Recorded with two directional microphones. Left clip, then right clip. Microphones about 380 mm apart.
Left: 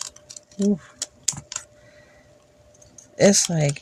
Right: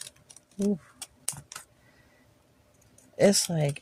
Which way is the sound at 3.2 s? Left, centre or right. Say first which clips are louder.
Left 5 dB; right.